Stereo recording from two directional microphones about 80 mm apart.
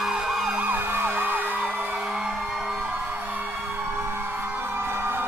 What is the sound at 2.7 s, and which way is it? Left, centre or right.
Music, right.